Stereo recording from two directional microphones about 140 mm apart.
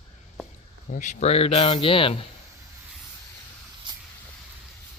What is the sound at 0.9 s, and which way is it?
Speech, 70° left (ahead or behind).